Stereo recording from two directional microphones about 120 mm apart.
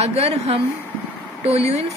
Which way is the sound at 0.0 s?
65° right (ahead or behind).